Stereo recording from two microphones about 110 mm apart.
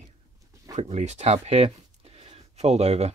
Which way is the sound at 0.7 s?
90° right.